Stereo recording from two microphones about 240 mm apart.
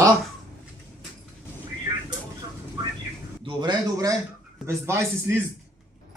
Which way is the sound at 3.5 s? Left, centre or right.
Centre.